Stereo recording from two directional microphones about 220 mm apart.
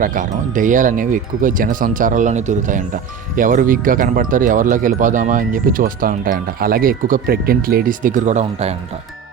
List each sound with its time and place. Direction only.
0.0 s speech: 35° right (ahead or behind)